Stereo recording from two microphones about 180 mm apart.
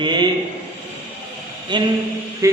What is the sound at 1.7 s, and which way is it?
Speech, 25° right (ahead or behind).